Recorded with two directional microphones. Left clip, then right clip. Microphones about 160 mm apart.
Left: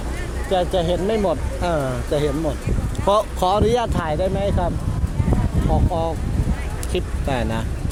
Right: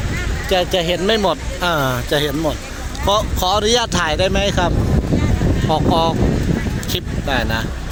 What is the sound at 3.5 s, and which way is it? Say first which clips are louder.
Speech: right 5 dB; centre (ahead or behind).